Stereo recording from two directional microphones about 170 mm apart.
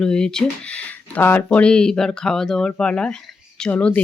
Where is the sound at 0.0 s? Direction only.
5° left (ahead or behind).